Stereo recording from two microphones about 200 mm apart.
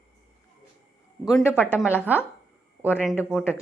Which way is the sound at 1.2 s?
5° right (ahead or behind).